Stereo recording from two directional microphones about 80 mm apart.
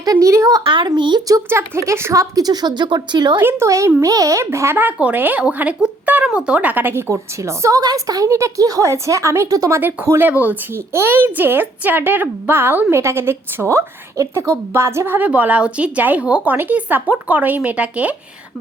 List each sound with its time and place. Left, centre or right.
0.0 s a woman's voice: right
0.6 s a woman's voice: right
1.5 s a woman's voice: right
2.3 s speech: right
3.4 s a woman's voice: right
7.1 s a woman's voice: right
10.1 s speech: right
10.8 s a woman's voice: right; by 18.2 s centre